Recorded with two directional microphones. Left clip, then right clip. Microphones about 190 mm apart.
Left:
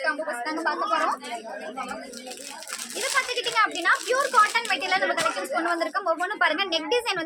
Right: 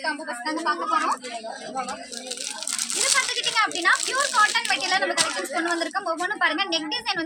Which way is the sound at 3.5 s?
15° left (ahead or behind).